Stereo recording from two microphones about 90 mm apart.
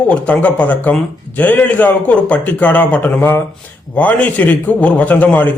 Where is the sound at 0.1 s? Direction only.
15° left (ahead or behind).